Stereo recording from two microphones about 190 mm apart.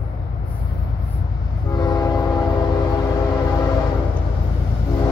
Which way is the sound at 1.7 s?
20° left (ahead or behind).